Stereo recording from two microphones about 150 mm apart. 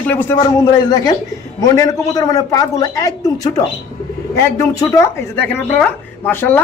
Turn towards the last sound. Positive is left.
turn(degrees=15)  # may be behind; listen again after turning